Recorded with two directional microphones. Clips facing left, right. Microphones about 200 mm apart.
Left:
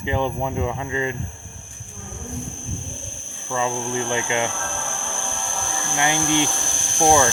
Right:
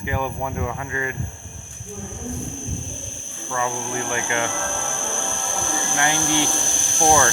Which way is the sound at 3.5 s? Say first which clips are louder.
Left 2 dB; 20° left (ahead or behind).